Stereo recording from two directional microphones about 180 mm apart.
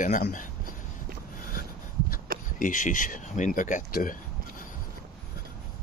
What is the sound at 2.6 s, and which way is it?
Speech, 45° left (ahead or behind).